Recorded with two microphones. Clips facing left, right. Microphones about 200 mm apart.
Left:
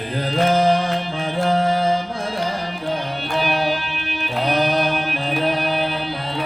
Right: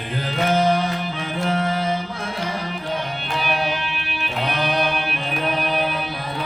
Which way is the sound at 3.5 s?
35° left (ahead or behind).